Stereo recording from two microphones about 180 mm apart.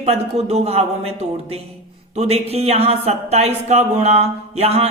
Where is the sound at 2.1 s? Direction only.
35° right (ahead or behind).